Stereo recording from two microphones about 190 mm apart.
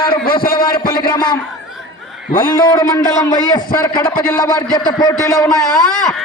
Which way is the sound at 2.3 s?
50° left (ahead or behind).